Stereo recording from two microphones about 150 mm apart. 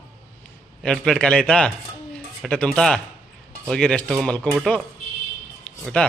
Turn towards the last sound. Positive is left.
turn(degrees=10)  # may be behind; listen again after turning